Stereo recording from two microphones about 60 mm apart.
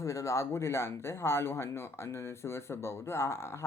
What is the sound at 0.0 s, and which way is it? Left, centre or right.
Speech, left.